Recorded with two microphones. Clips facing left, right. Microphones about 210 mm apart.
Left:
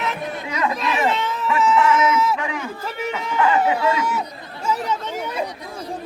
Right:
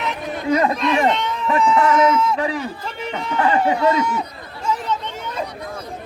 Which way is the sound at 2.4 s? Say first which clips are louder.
Right 4 dB; 35° right (ahead or behind).